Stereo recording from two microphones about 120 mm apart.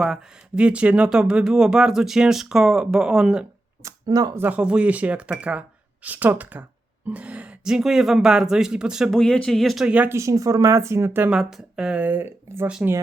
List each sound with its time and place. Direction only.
0.0 s speech: 5° right (ahead or behind)
3.8 s speech: 30° right (ahead or behind)
4.4 s speech: 15° right (ahead or behind)
9.1 s speech: 5° left (ahead or behind); by 10.2 s 10° right (ahead or behind)
10.2 s speech: 25° right (ahead or behind)
11.3 s speech: 5° right (ahead or behind)